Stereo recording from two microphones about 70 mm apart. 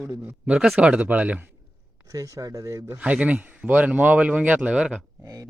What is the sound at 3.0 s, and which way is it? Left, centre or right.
Speech, centre.